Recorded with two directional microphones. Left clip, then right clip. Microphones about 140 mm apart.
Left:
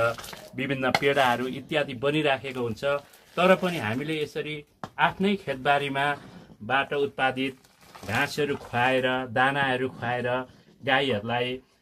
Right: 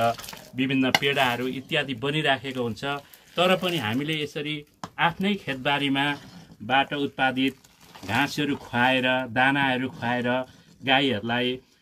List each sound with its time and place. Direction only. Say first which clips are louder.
0.6 s speech: right 2 dB; 45° left (ahead or behind); by 11.4 s 20° left (ahead or behind)